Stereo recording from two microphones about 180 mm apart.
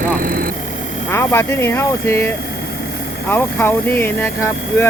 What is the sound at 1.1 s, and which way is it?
Speech, 15° left (ahead or behind).